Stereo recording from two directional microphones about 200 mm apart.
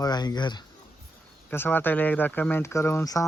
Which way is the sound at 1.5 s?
10° left (ahead or behind).